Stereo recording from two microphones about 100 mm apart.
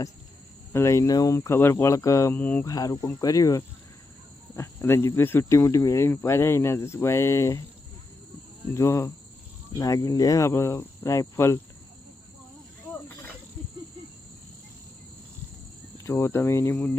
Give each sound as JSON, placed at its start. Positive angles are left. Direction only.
{"t": 0.7, "sound": "cricket", "side_deg": 30}
{"t": 1.4, "sound": "speech", "side_deg": 25}
{"t": 1.7, "sound": "cricket", "side_deg": 35}
{"t": 2.3, "sound": "speech", "side_deg": 15}
{"t": 2.6, "sound": "cricket", "side_deg": 35}
{"t": 4.5, "sound": "speech", "side_deg": 25}
{"t": 8.7, "sound": "speech", "side_deg": 30}
{"t": 9.7, "sound": "cricket", "side_deg": 35}
{"t": 16.0, "sound": "speech", "side_deg": 25}